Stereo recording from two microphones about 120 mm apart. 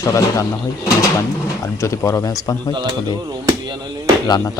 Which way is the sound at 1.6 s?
20° left (ahead or behind).